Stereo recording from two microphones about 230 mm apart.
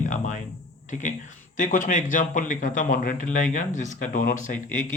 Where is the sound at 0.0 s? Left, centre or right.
Left.